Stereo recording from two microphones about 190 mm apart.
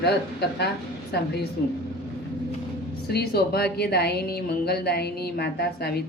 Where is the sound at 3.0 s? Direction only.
55° left (ahead or behind).